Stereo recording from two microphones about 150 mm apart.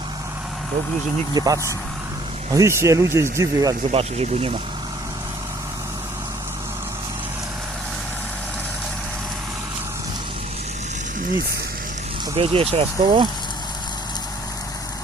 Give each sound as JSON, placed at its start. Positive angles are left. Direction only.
{"t": 1.3, "sound": "speech", "side_deg": -25}
{"t": 3.9, "sound": "speech", "side_deg": -40}
{"t": 12.4, "sound": "speech", "side_deg": -40}